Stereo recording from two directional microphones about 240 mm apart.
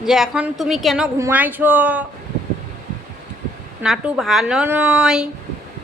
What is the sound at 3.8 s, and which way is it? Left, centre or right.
A woman's voice, centre.